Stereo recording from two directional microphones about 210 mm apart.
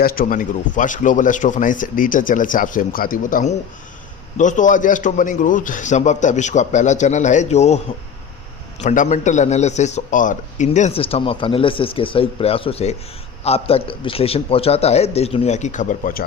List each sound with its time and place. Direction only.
0.0 s speech: 45° left (ahead or behind)
8.8 s a man's voice: 35° left (ahead or behind)